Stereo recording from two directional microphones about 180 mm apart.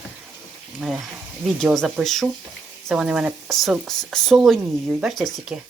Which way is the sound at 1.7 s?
Centre (ahead or behind).